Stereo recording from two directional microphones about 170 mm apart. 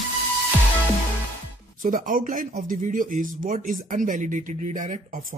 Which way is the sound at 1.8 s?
50° right (ahead or behind).